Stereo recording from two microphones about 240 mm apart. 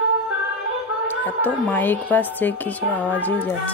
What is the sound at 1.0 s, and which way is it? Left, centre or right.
A woman's voice, centre.